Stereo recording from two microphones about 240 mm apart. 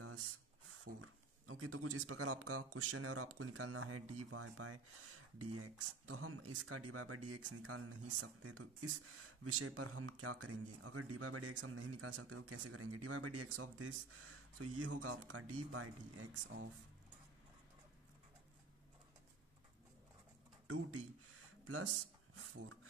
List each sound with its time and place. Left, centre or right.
0.0 s a sound: right
3.3 s speech: right
20.6 s speech: right